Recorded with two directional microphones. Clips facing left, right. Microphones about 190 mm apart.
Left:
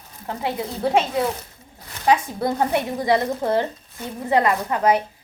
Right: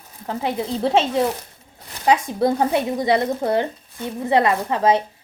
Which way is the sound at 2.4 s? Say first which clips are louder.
Right 3 dB; 20° right (ahead or behind).